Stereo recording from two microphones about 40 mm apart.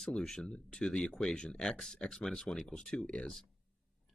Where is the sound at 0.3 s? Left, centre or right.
Centre.